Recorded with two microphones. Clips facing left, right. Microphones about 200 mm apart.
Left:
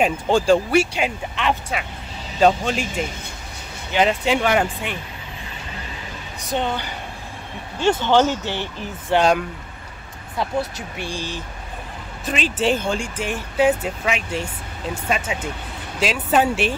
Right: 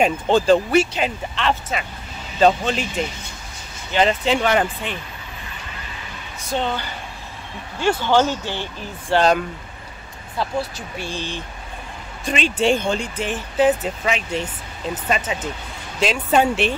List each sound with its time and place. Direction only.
0.0 s speech: 10° left (ahead or behind)
3.9 s speech: 10° left (ahead or behind)
6.5 s speech: 15° left (ahead or behind)
8.0 s speech: 15° left (ahead or behind)
10.4 s speech: 20° left (ahead or behind)